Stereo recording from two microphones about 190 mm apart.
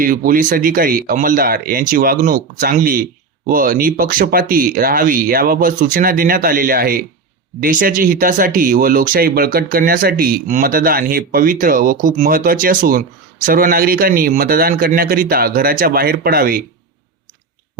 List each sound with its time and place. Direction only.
0.0 s speech: 45° right (ahead or behind)